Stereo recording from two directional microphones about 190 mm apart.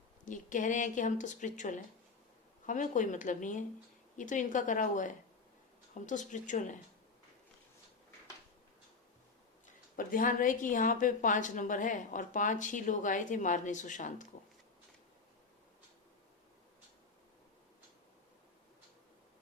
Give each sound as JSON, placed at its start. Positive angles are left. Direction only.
{"t": 0.3, "sound": "speech", "side_deg": 40}
{"t": 9.9, "sound": "a woman's voice", "side_deg": 45}